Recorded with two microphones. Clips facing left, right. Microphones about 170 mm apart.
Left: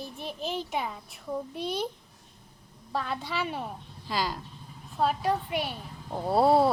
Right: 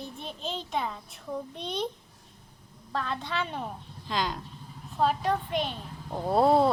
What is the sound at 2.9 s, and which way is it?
A child's voice, 10° left (ahead or behind).